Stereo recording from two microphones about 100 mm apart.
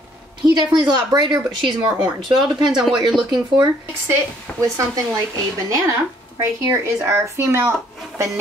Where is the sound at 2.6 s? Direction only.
5° right (ahead or behind).